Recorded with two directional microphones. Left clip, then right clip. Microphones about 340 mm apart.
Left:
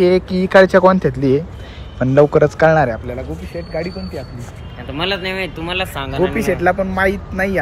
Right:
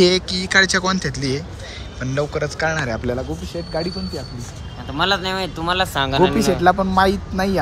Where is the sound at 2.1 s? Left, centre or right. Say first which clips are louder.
Left 11 dB; left.